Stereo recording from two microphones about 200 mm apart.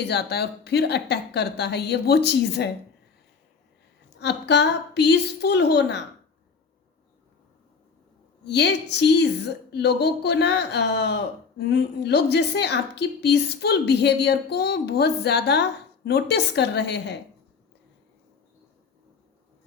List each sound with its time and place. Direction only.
0.1 s a woman's voice: 55° left (ahead or behind)
4.2 s a woman's voice: 60° left (ahead or behind)
8.4 s a woman's voice: 60° left (ahead or behind)